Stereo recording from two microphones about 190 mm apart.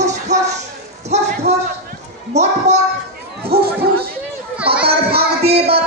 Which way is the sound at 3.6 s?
55° right (ahead or behind).